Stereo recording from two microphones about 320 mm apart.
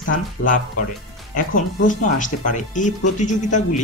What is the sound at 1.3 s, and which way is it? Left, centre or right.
Speech, left.